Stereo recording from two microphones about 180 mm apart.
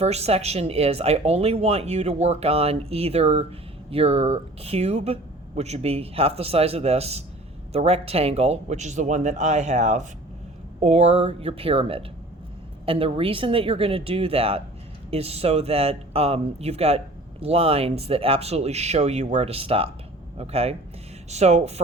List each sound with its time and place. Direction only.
0.0 s speech: 35° right (ahead or behind)